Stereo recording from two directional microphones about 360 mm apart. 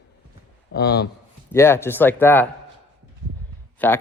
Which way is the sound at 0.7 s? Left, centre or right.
Left.